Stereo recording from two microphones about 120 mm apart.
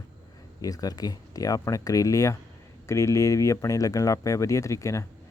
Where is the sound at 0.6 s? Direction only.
30° left (ahead or behind).